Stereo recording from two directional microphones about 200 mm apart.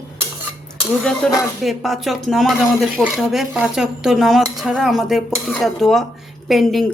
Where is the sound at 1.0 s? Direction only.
5° left (ahead or behind).